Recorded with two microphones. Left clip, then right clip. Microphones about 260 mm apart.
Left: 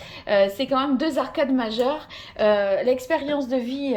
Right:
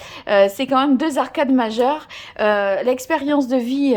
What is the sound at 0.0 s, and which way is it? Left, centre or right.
A woman's voice, centre.